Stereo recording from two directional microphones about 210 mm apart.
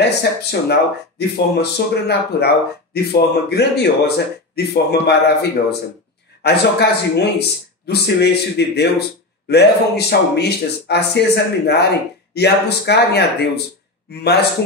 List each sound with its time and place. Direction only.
0.2 s speech: 50° left (ahead or behind)